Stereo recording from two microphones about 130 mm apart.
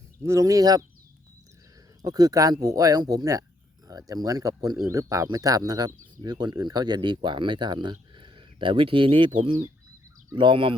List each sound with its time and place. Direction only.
0.2 s speech: 20° right (ahead or behind)
2.0 s speech: 30° right (ahead or behind)